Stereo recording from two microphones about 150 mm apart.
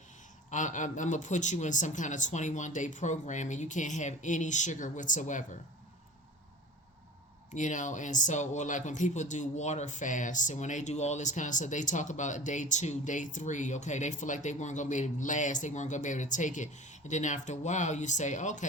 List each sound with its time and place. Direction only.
0.5 s speech: 55° left (ahead or behind)
7.5 s speech: 55° left (ahead or behind)